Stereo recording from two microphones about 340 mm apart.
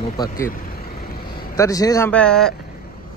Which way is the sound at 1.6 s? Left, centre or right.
Centre.